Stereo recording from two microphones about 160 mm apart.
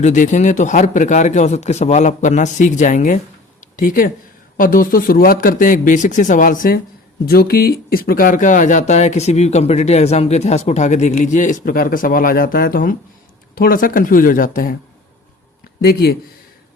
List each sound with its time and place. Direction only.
0.0 s speech: 50° left (ahead or behind)
7.3 s speech: 75° left (ahead or behind)
15.8 s speech: 75° left (ahead or behind)